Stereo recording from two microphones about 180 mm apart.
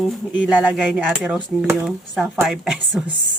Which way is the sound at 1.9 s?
Centre (ahead or behind).